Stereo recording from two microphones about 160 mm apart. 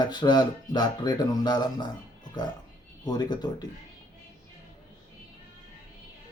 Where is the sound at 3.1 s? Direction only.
25° left (ahead or behind).